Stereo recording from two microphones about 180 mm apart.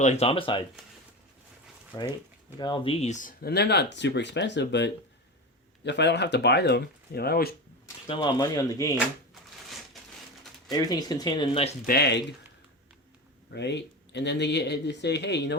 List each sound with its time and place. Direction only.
0.0 s speech: 35° left (ahead or behind)
1.9 s speech: 20° left (ahead or behind); by 7.5 s 60° left (ahead or behind)
8.0 s speech: 25° left (ahead or behind)
9.3 s a sound: centre (ahead or behind)
10.7 s speech: 20° left (ahead or behind)
11.9 s speech: 65° left (ahead or behind)
13.5 s speech: 70° left (ahead or behind)